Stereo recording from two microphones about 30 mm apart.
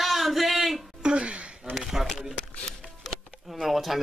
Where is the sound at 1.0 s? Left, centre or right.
Right.